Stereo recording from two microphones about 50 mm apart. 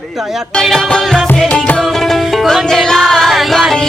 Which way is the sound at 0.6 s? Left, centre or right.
Centre.